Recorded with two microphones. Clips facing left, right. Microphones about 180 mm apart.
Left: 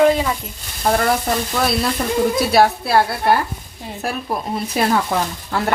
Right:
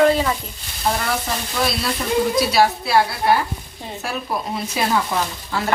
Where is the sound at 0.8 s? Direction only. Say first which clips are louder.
Left 5 dB; 50° left (ahead or behind).